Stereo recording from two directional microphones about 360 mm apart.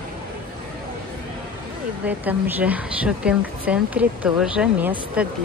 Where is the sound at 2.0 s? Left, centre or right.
Centre.